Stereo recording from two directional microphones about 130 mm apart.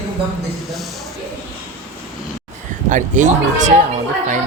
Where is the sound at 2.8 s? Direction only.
75° right (ahead or behind).